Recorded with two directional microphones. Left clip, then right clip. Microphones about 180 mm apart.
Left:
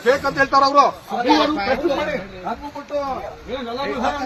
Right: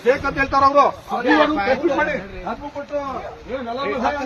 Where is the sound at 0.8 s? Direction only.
Centre (ahead or behind).